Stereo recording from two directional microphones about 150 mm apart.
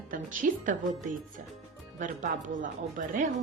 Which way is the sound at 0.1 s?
60° right (ahead or behind).